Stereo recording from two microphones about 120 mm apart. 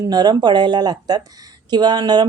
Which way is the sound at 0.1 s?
35° right (ahead or behind).